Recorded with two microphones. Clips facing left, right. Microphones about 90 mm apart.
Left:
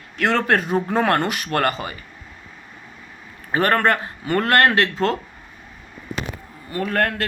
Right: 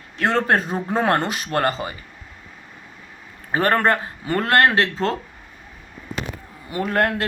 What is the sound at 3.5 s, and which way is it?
Speech, 25° right (ahead or behind).